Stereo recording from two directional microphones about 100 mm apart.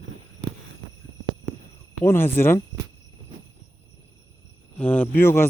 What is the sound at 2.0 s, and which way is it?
Speech, 25° left (ahead or behind).